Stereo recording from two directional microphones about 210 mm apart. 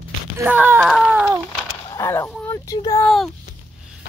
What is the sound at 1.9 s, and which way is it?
Speech, 15° left (ahead or behind).